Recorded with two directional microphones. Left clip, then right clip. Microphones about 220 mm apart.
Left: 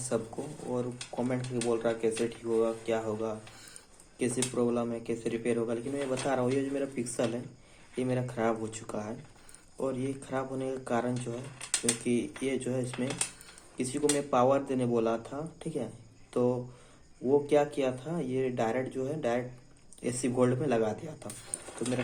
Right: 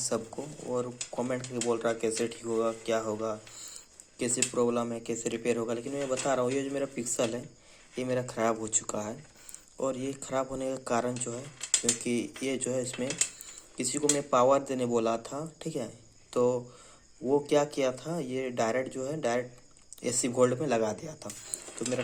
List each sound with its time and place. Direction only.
0.1 s speech: 20° right (ahead or behind)